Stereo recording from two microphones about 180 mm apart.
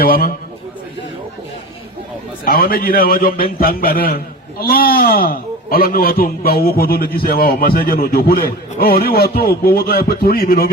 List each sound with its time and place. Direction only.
0.0 s a man's voice: 55° left (ahead or behind)
2.4 s a man's voice: 55° left (ahead or behind)